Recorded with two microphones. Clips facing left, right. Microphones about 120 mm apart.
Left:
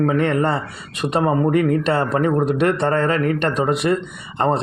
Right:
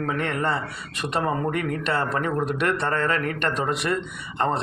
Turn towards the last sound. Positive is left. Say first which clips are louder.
# left 5 dB
turn(degrees=20)  # may be behind; listen again after turning